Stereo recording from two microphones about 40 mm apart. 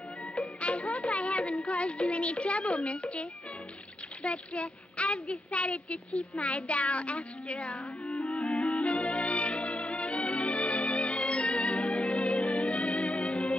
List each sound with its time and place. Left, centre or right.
0.4 s music: left
4.2 s child singing: left